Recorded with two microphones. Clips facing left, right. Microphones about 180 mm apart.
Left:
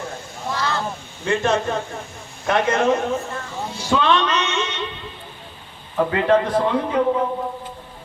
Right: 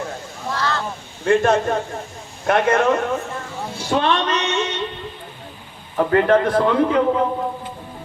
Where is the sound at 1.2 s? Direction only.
50° right (ahead or behind).